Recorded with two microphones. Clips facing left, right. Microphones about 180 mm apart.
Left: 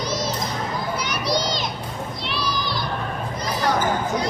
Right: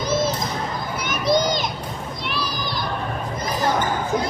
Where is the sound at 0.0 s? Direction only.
50° right (ahead or behind).